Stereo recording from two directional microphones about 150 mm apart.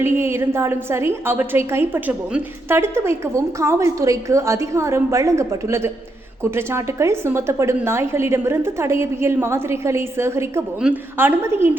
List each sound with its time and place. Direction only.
0.0 s a woman's voice: 15° right (ahead or behind)